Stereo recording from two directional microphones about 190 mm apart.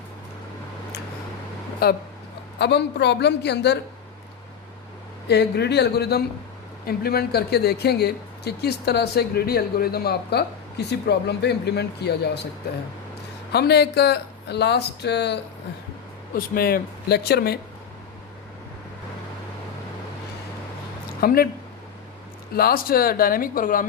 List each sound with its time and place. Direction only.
1.8 s speech: 55° left (ahead or behind)
5.3 s speech: 60° left (ahead or behind)
13.5 s speech: 60° left (ahead or behind)
16.3 s speech: 50° left (ahead or behind)
21.2 s speech: 50° left (ahead or behind)
22.5 s speech: 50° left (ahead or behind)